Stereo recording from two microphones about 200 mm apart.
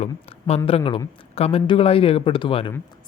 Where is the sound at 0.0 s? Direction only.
30° left (ahead or behind).